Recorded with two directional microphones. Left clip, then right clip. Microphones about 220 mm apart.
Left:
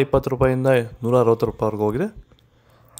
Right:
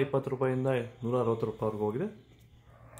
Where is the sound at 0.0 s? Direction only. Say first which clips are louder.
Left 11 dB; 45° left (ahead or behind).